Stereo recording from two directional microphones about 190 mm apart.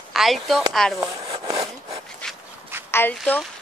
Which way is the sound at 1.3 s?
25° right (ahead or behind).